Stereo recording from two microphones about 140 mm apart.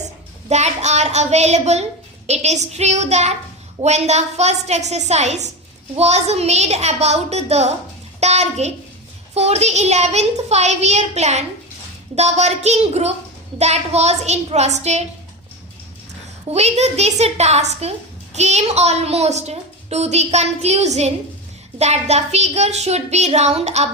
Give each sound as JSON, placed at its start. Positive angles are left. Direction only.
{"t": 0.4, "sound": "a woman's voice", "side_deg": -55}
{"t": 16.5, "sound": "a woman's voice", "side_deg": -50}